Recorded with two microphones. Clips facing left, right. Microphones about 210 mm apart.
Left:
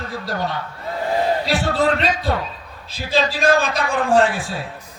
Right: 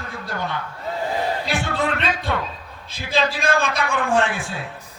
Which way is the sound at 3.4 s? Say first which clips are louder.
Left 4 dB; 35° left (ahead or behind).